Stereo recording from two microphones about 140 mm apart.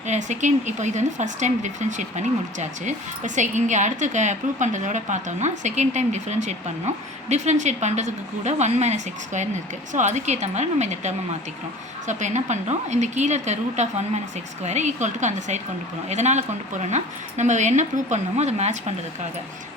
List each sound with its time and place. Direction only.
0.1 s speech: 60° right (ahead or behind)